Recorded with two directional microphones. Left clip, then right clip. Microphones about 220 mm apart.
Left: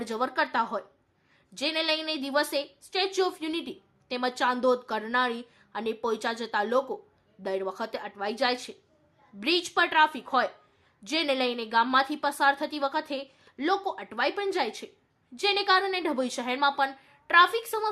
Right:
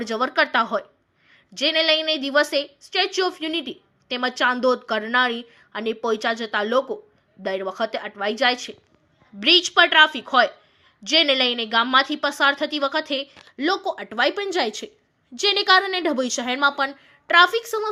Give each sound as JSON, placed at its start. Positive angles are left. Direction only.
{"t": 0.0, "sound": "a woman's voice", "side_deg": -10}